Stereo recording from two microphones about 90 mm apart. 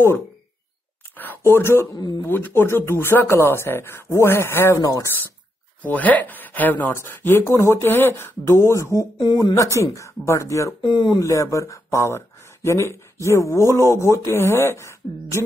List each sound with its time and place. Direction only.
1.1 s a sound: 20° left (ahead or behind)
2.0 s speech: 50° left (ahead or behind)
2.2 s speech: 25° left (ahead or behind)
4.7 s speech: 40° left (ahead or behind)
5.8 s speech: 15° left (ahead or behind); by 9.0 s 35° left (ahead or behind)
9.2 s speech: 45° left (ahead or behind)
10.8 s speech: 60° left (ahead or behind)
11.1 s speech: 35° left (ahead or behind)